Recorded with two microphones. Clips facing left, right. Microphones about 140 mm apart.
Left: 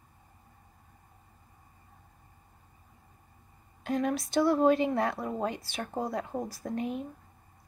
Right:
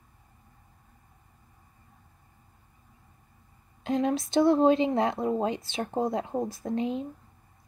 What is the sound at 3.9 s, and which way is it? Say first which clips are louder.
Speech: right 3 dB; 25° right (ahead or behind).